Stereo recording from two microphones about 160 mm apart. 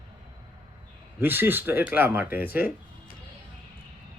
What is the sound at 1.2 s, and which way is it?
Speech, 15° right (ahead or behind).